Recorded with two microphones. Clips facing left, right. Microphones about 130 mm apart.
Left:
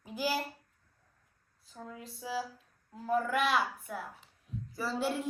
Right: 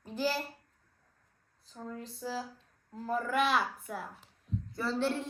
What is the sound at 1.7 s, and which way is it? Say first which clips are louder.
A child's voice: right 3 dB; 5° left (ahead or behind).